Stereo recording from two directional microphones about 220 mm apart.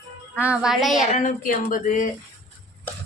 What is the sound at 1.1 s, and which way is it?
Speech, 35° left (ahead or behind).